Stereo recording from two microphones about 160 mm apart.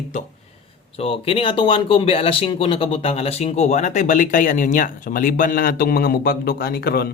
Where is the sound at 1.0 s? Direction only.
35° left (ahead or behind).